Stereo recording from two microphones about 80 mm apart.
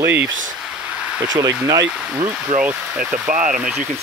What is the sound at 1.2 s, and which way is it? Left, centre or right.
Speech, right.